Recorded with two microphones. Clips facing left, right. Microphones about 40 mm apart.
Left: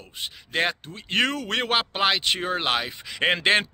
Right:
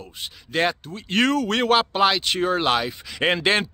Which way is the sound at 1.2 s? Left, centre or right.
Centre.